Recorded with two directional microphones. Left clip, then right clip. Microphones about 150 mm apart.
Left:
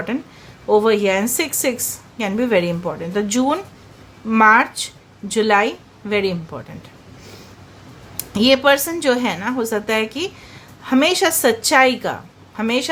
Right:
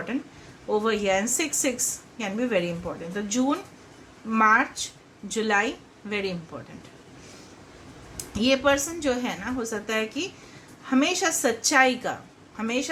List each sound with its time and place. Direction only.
0.7 s a woman's voice: 40° left (ahead or behind)
8.3 s a woman's voice: 45° left (ahead or behind)